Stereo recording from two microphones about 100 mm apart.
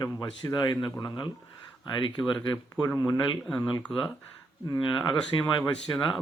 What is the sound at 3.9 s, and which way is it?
Speech, 60° left (ahead or behind).